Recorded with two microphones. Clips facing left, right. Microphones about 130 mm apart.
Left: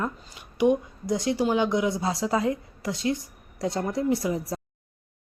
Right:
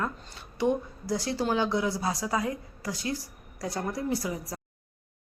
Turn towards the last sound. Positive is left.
turn(degrees=25)  # may be behind; listen again after turning